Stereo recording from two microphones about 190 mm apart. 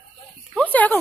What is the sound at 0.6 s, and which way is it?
Speech, 10° left (ahead or behind).